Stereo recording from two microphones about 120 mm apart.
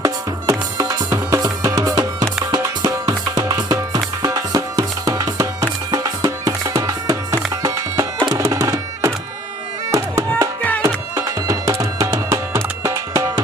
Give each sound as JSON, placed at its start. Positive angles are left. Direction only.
{"t": 0.0, "sound": "music", "side_deg": -30}
{"t": 10.6, "sound": "music", "side_deg": 10}
{"t": 10.8, "sound": "music", "side_deg": -25}